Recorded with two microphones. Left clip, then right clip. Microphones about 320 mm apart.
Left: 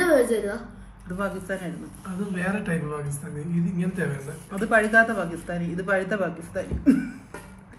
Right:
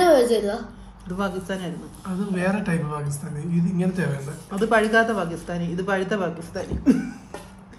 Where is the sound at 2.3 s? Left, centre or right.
Centre.